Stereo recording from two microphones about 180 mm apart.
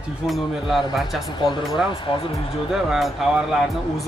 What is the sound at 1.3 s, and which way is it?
Speech, 25° left (ahead or behind).